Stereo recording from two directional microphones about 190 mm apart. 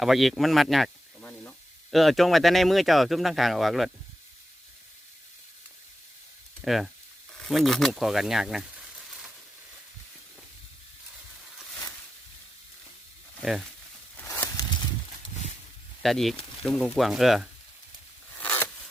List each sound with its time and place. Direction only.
0.0 s speech: centre (ahead or behind)
6.6 s speech: centre (ahead or behind)
13.4 s speech: centre (ahead or behind)
14.2 s a sound: 10° left (ahead or behind)
16.0 s speech: centre (ahead or behind)
18.3 s a sound: 5° left (ahead or behind)